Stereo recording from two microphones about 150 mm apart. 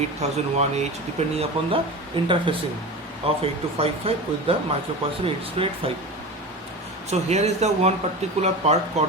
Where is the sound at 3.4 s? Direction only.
40° right (ahead or behind).